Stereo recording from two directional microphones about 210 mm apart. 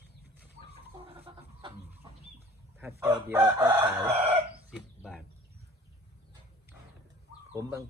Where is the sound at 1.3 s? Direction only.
20° right (ahead or behind).